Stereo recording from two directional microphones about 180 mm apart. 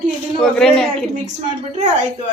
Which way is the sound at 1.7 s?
40° right (ahead or behind).